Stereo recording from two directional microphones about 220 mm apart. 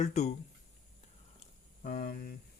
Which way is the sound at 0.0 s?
30° left (ahead or behind).